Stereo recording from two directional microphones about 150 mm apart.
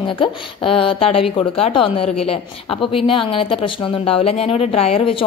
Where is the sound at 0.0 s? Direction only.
35° left (ahead or behind).